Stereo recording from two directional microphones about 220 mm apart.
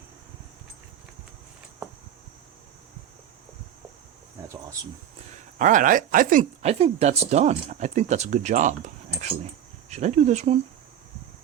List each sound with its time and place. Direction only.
5.5 s speech: 35° right (ahead or behind)
9.9 s speech: 30° right (ahead or behind)